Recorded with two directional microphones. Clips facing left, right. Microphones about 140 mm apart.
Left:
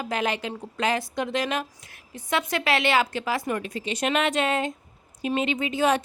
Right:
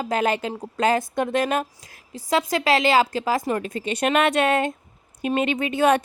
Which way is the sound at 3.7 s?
55° right (ahead or behind).